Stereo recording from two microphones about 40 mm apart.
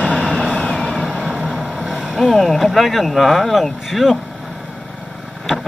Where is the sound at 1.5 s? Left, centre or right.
Centre.